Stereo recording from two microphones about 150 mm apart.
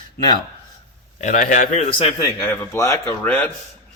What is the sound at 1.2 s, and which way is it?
Speech, 55° left (ahead or behind).